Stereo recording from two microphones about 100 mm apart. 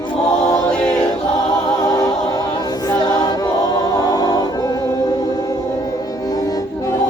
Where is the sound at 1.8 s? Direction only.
35° left (ahead or behind).